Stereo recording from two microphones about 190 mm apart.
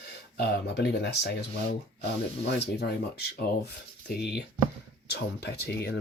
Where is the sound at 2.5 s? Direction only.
55° left (ahead or behind).